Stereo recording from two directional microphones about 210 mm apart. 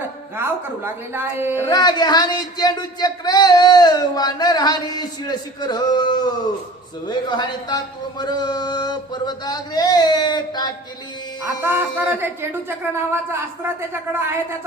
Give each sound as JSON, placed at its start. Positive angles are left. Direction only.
{"t": 1.1, "sound": "speech", "side_deg": -10}
{"t": 1.6, "sound": "speech", "side_deg": 20}
{"t": 11.6, "sound": "speech", "side_deg": -10}